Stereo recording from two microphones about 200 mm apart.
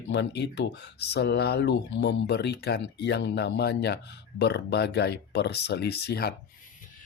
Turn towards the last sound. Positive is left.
turn(degrees=50)  # may be behind; listen again after turning